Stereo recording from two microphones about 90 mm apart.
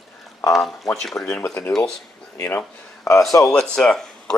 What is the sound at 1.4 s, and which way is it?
Speech, 25° left (ahead or behind).